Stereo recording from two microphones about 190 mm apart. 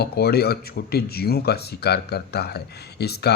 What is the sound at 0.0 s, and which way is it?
Speech, 55° left (ahead or behind).